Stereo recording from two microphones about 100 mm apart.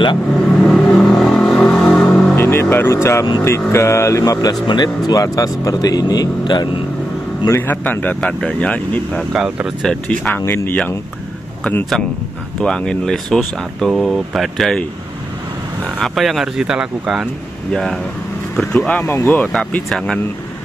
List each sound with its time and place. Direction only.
0.7 s vehicle: 5° left (ahead or behind)
1.9 s music: 15° left (ahead or behind)
2.3 s speech: 25° left (ahead or behind); by 6.7 s 45° left (ahead or behind)
7.4 s speech: 20° left (ahead or behind)
9.3 s speech: 5° right (ahead or behind)
9.8 s speech: 15° left (ahead or behind)
10.4 s speech: 25° left (ahead or behind)
11.7 s speech: 10° left (ahead or behind)
16.0 s speech: centre (ahead or behind)
17.7 s speech: 5° left (ahead or behind); by 19.5 s 20° left (ahead or behind)
19.5 s speech: 5° left (ahead or behind)